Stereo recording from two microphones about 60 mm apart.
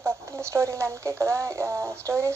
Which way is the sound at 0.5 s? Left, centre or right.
Right.